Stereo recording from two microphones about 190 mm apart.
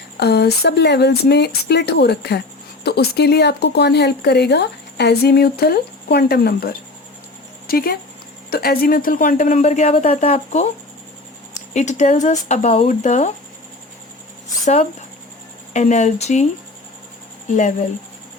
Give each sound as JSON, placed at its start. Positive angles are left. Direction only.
{"t": 0.2, "sound": "speech", "side_deg": 60}
{"t": 11.7, "sound": "speech", "side_deg": 40}
{"t": 14.6, "sound": "speech", "side_deg": 35}